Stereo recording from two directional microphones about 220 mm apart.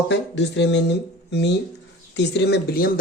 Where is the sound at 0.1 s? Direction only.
55° left (ahead or behind).